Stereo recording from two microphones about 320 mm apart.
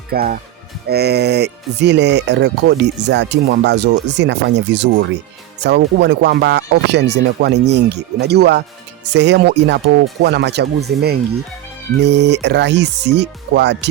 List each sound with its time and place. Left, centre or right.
0.1 s speech: right